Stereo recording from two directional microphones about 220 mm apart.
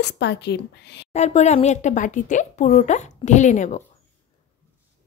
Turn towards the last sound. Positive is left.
turn(degrees=35)  # may be behind; listen again after turning